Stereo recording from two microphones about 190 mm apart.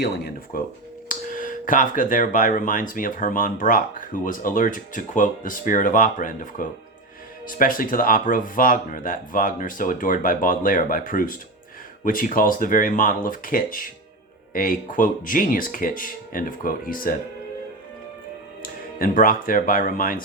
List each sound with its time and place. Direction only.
0.0 s speech: 55° left (ahead or behind)
1.0 s speech: 45° left (ahead or behind)
18.6 s speech: 50° left (ahead or behind)